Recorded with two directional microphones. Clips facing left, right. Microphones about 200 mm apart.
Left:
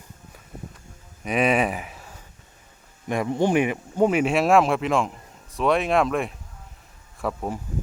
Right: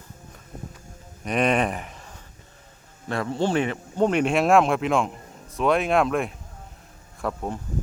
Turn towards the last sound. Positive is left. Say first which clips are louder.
# left 1 dB
turn(degrees=5)  # may be behind; listen again after turning